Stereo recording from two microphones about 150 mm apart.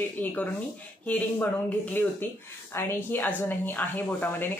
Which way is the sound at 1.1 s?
10° left (ahead or behind).